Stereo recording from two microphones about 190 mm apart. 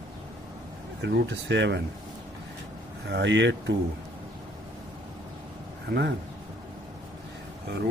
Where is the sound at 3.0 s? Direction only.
65° right (ahead or behind).